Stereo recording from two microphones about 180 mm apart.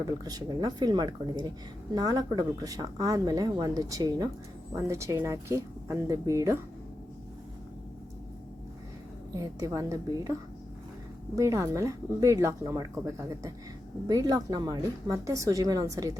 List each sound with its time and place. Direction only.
0.0 s speech: 20° right (ahead or behind)
9.3 s speech: 20° right (ahead or behind)
11.3 s speech: 15° right (ahead or behind)